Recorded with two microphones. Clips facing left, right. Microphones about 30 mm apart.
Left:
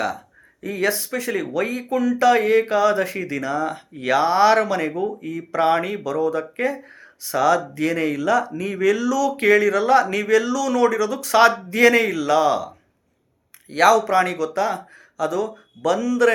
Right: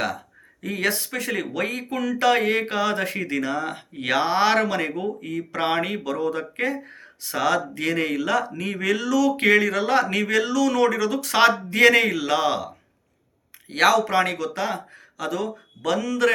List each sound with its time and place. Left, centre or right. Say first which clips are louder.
0.6 s speech: left 2 dB; right